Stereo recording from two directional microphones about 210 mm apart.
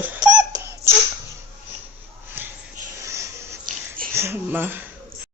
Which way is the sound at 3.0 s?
15° right (ahead or behind).